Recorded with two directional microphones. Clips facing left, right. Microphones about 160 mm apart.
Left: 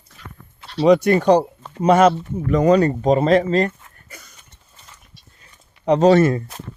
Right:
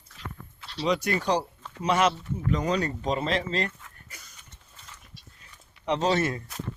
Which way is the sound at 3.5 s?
50° left (ahead or behind).